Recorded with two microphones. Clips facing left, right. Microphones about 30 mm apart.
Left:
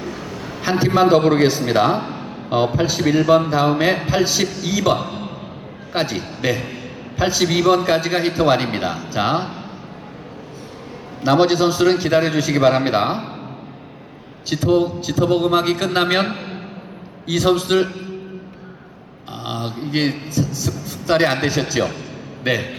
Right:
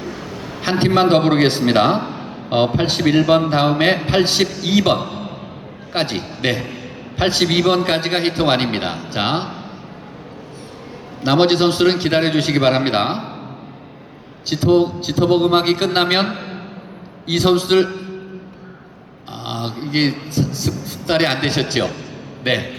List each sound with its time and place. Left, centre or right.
0.0 s a sound: centre
0.6 s a man's voice: right
2.0 s a sound: centre
2.7 s a man's voice: right
3.0 s a man's voice: right
6.1 s a man's voice: right
11.2 s a man's voice: right
14.5 s speech: centre
15.0 s a man's voice: right
16.3 s a sound: centre
17.3 s a man's voice: right
19.5 s a sound: right
20.7 s a man's voice: right